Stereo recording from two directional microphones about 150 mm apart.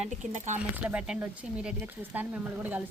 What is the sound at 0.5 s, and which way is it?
Speech, 10° right (ahead or behind).